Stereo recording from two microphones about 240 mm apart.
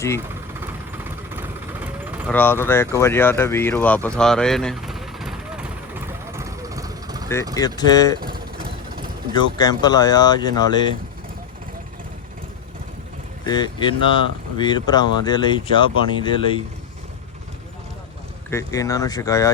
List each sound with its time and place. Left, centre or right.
0.6 s vehicle: centre
2.2 s a sound: centre
7.5 s speech: centre
8.2 s a sound: right
9.3 s speech: centre
13.4 s speech: centre
18.5 s speech: centre